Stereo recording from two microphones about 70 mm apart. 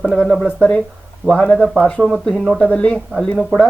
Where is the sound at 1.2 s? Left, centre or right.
Centre.